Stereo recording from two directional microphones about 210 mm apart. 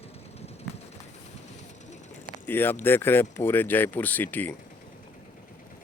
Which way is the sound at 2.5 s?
10° left (ahead or behind).